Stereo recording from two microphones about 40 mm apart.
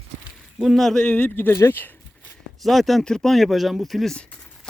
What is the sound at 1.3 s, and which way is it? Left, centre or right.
Speech, left.